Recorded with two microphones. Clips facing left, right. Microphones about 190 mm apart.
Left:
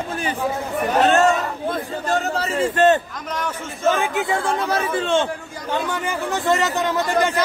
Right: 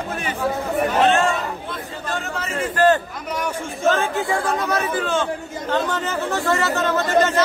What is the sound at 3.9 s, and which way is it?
A man's voice, 15° left (ahead or behind).